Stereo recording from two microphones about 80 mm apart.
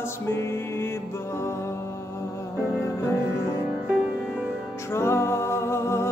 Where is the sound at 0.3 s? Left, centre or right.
Left.